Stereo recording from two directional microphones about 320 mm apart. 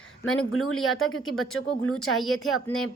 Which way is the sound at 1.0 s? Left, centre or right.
Left.